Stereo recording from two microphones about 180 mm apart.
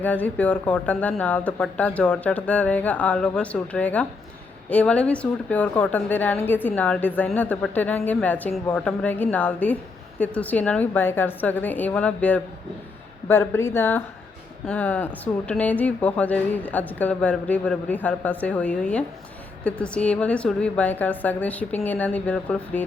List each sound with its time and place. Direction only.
0.0 s a woman's voice: 10° left (ahead or behind)